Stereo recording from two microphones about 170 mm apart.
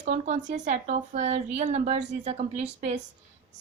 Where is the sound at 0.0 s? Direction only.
45° right (ahead or behind).